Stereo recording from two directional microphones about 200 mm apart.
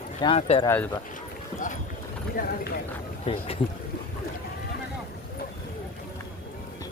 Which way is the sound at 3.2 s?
30° left (ahead or behind).